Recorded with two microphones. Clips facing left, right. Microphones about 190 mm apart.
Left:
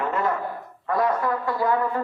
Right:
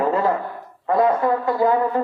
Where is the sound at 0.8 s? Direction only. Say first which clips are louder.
Right 5 dB; 25° right (ahead or behind).